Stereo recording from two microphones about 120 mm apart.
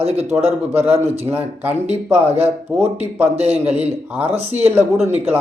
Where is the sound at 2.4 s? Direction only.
60° right (ahead or behind).